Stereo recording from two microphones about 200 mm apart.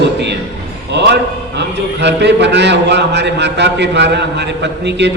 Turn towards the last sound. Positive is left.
turn(degrees=-60)  # may be behind; listen again after turning